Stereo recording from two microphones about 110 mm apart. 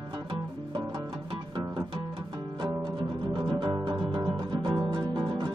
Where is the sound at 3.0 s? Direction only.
45° right (ahead or behind).